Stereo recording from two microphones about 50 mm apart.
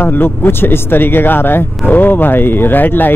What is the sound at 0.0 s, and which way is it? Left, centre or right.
Speech, left.